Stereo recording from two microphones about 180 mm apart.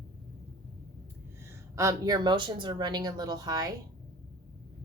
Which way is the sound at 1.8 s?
20° right (ahead or behind).